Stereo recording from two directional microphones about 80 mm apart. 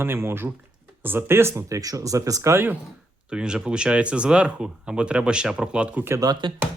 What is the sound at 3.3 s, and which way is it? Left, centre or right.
Speech, centre.